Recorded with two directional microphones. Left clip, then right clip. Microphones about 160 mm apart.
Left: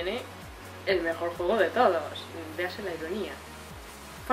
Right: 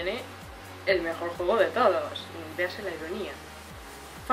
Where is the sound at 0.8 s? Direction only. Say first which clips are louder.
Right 1 dB; 5° right (ahead or behind).